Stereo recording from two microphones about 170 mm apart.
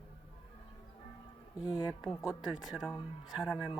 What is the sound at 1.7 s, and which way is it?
Speech, 5° right (ahead or behind).